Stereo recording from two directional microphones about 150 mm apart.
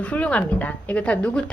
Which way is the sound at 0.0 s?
10° left (ahead or behind).